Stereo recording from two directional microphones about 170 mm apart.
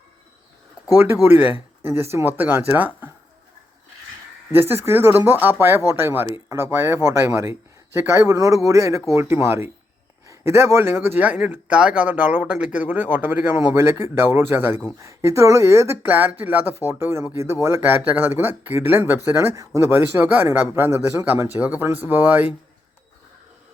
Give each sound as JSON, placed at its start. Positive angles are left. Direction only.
{"t": 0.9, "sound": "speech", "side_deg": -10}
{"t": 4.5, "sound": "speech", "side_deg": -15}